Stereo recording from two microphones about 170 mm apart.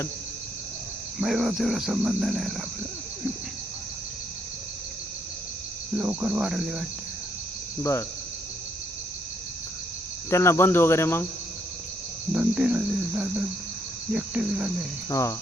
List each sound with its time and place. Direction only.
1.2 s speech: centre (ahead or behind)
6.0 s speech: 10° right (ahead or behind)
7.8 s cricket: 15° left (ahead or behind)
10.2 s cricket: 15° left (ahead or behind)
12.3 s speech: 5° right (ahead or behind)
15.1 s cricket: 20° left (ahead or behind)